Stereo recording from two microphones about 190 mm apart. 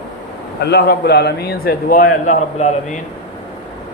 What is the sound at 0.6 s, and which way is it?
A man's voice, 60° left (ahead or behind).